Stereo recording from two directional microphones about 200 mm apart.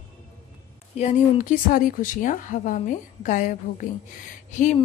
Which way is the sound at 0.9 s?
40° left (ahead or behind).